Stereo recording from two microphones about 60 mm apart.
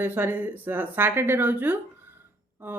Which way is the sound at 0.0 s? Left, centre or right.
Right.